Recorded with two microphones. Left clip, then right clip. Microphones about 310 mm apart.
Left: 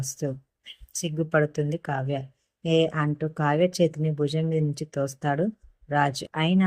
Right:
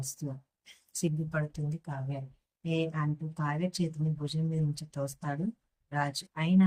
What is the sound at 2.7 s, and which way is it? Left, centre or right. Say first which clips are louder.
Speech: left 10 dB; centre.